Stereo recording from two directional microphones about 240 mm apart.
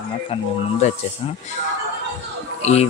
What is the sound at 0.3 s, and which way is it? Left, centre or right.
Speech, left.